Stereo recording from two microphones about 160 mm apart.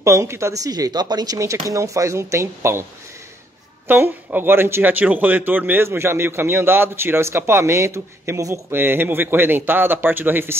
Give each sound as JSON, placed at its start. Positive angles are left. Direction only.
{"t": 0.0, "sound": "speech", "side_deg": -20}
{"t": 3.8, "sound": "a man's voice", "side_deg": -15}